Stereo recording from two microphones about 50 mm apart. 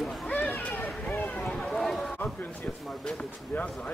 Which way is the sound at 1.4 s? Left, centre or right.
Centre.